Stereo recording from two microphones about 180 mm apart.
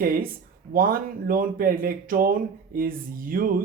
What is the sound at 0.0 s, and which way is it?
Speech, 55° right (ahead or behind).